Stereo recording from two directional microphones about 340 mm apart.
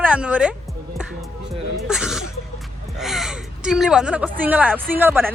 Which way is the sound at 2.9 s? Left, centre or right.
Centre.